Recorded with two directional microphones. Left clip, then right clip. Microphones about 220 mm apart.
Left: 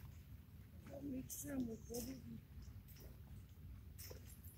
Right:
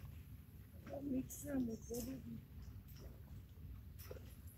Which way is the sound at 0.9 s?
10° left (ahead or behind).